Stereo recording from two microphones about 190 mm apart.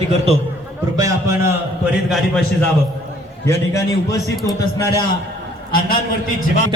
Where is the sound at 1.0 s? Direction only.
15° right (ahead or behind).